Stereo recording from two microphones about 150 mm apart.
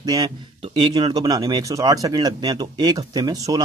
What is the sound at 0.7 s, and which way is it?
Speech, 35° right (ahead or behind).